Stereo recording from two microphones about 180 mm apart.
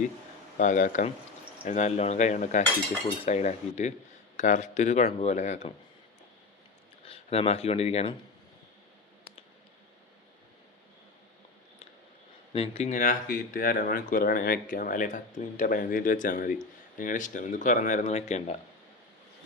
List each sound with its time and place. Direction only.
0.5 s speech: 45° left (ahead or behind)
7.0 s speech: 30° left (ahead or behind)
12.5 s speech: 35° left (ahead or behind)